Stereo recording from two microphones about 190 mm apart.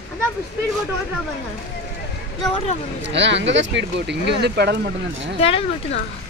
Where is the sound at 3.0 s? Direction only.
70° right (ahead or behind).